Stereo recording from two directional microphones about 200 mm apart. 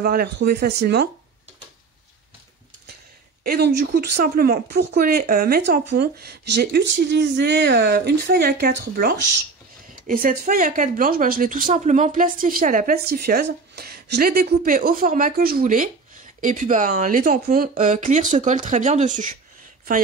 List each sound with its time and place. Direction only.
0.0 s speech: 50° right (ahead or behind)
3.4 s speech: 50° right (ahead or behind)